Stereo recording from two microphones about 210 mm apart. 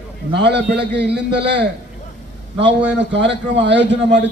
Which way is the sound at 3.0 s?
55° right (ahead or behind).